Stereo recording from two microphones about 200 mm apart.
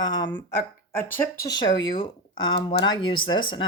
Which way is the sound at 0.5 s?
10° left (ahead or behind).